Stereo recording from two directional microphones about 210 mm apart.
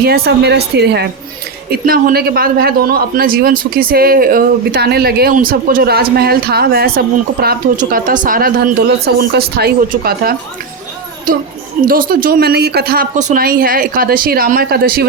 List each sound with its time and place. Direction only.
0.0 s speech: 50° right (ahead or behind)